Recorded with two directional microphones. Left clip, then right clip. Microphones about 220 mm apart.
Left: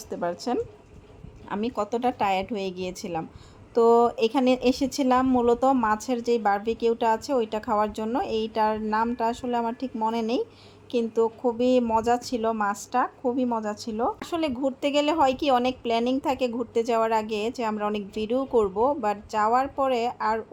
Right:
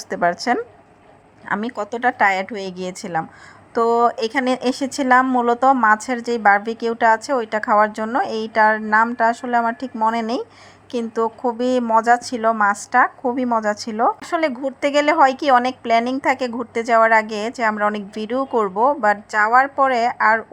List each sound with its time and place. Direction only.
0.1 s a woman's voice: 20° right (ahead or behind)